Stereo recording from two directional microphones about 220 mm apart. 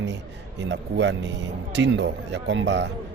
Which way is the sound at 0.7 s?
55° right (ahead or behind).